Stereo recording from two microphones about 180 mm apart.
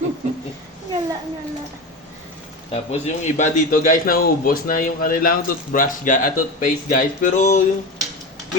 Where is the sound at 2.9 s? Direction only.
45° left (ahead or behind).